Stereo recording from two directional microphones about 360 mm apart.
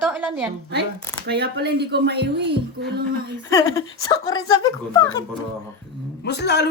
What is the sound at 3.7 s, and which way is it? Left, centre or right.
Speech, centre.